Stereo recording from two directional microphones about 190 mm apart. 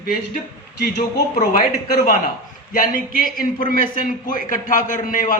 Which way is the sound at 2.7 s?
50° left (ahead or behind).